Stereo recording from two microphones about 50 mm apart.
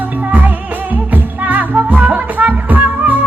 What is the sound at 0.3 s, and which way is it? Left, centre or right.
Music, right.